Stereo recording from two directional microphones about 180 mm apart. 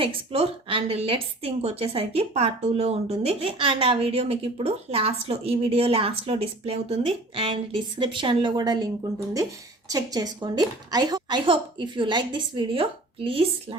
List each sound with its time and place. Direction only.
0.0 s speech: 30° right (ahead or behind)
9.9 s a woman's voice: 20° right (ahead or behind)